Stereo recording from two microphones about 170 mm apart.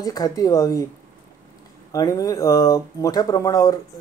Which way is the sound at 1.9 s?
20° left (ahead or behind).